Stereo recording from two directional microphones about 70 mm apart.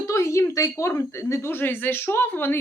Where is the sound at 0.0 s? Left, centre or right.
Left.